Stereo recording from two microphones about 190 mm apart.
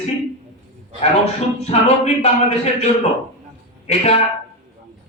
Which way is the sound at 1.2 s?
35° left (ahead or behind).